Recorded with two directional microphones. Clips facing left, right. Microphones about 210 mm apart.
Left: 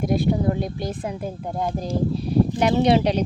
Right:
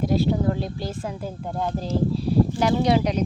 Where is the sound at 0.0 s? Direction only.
15° left (ahead or behind).